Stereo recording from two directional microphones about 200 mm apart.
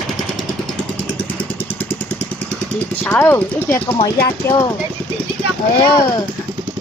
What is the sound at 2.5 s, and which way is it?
Speech, 10° left (ahead or behind).